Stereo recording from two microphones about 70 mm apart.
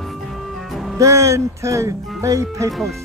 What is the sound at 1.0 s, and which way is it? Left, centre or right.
Speech, right.